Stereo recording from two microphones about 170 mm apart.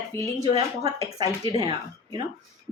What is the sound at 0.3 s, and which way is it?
A woman's voice, 20° right (ahead or behind).